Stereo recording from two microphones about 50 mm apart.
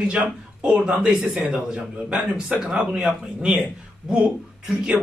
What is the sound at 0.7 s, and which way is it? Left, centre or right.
Speech, right.